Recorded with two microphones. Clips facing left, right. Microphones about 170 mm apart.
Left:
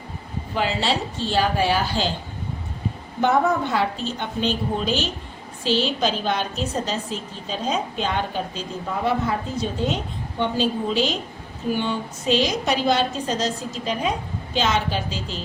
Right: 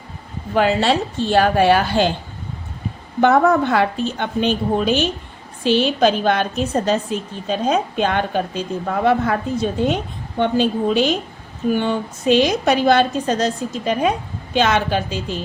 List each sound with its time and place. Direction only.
0.5 s a woman's voice: 55° right (ahead or behind)
3.2 s a woman's voice: 60° right (ahead or behind)